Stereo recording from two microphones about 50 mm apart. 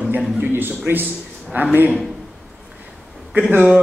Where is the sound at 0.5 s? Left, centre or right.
Right.